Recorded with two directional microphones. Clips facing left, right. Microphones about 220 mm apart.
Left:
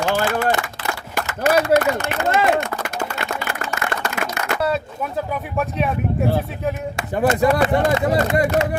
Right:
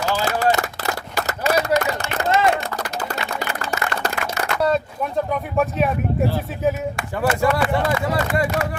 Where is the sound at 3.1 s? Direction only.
35° right (ahead or behind).